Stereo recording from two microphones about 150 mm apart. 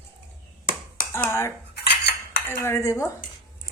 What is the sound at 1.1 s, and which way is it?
Speech, 15° left (ahead or behind).